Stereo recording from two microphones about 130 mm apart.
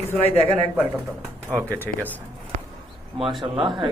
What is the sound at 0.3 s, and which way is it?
Speech, 50° left (ahead or behind).